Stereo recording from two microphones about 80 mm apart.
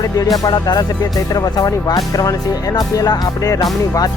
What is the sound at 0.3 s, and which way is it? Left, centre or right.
Speech, left.